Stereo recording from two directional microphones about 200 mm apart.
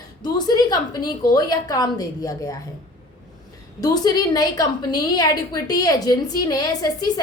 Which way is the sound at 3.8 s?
20° left (ahead or behind).